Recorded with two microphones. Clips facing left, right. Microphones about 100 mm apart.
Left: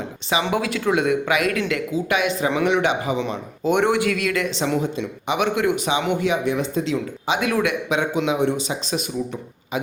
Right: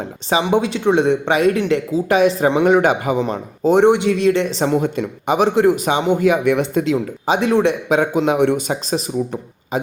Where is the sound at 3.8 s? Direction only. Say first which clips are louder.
Right 8 dB; 25° right (ahead or behind).